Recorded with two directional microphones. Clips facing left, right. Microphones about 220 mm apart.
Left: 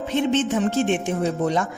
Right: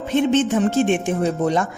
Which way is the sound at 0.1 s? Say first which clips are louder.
Right 4 dB; 50° right (ahead or behind).